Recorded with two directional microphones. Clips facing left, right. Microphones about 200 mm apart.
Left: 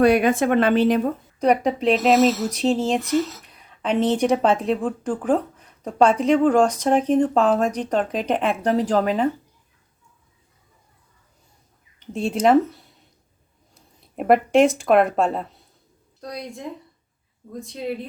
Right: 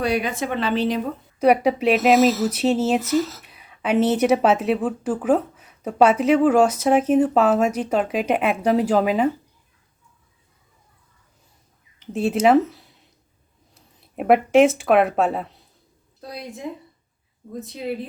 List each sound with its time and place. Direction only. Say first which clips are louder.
0.0 s speech: left 7 dB; 55° left (ahead or behind)
1.4 s speech: right 3 dB; 10° right (ahead or behind)
11.9 s speech: right 3 dB; 5° right (ahead or behind)